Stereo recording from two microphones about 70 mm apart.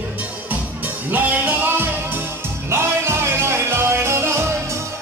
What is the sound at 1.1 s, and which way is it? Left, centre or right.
Music, right.